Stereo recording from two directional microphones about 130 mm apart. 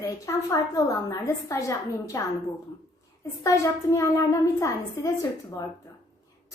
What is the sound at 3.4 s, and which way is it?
A woman's voice, 25° left (ahead or behind).